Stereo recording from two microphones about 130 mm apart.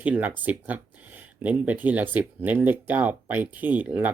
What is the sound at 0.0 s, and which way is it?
Speech, 10° right (ahead or behind).